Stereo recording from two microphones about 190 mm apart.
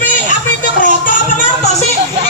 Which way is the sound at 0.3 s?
45° left (ahead or behind).